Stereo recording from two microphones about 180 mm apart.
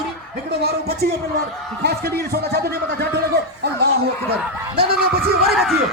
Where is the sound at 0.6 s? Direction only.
60° right (ahead or behind).